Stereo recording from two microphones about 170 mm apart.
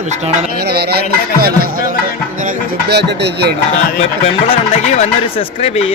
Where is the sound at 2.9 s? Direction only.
75° right (ahead or behind).